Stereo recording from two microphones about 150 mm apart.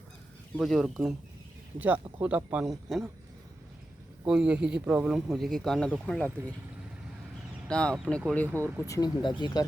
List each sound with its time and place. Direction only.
0.5 s speech: 5° left (ahead or behind)
2.2 s a man's voice: 10° right (ahead or behind)
4.3 s speech: 5° right (ahead or behind)
7.7 s speech: 5° left (ahead or behind)
8.4 s a man's voice: 15° right (ahead or behind)
8.9 s speech: 30° left (ahead or behind)